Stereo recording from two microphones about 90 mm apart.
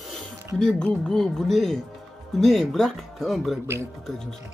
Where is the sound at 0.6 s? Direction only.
10° left (ahead or behind).